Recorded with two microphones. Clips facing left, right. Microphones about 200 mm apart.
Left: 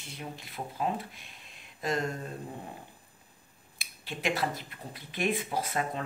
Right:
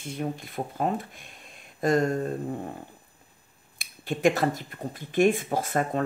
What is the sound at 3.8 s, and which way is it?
Speech, 45° right (ahead or behind).